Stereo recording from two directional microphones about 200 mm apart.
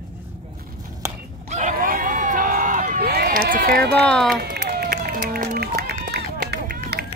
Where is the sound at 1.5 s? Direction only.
35° right (ahead or behind); by 4.0 s 50° right (ahead or behind).